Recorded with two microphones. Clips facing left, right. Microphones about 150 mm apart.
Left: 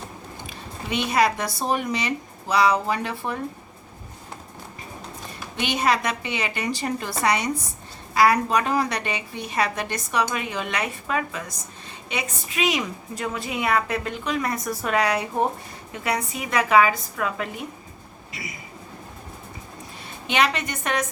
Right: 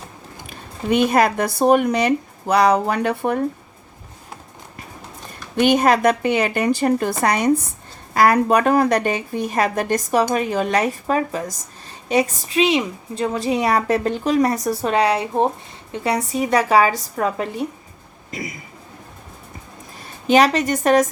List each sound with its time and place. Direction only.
0.4 s speech: 50° right (ahead or behind)
5.5 s a woman's voice: 50° right (ahead or behind)
12.5 s a woman's voice: 30° right (ahead or behind)
18.3 s a man's voice: 45° right (ahead or behind)
20.2 s a woman's voice: 40° right (ahead or behind)